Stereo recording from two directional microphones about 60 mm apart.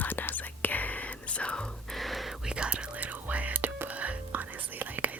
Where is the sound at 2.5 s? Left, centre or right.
Centre.